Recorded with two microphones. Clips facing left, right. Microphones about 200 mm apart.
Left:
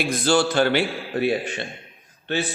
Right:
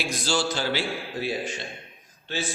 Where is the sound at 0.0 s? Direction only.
55° left (ahead or behind).